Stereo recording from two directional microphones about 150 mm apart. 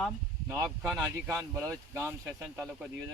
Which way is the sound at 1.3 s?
20° right (ahead or behind).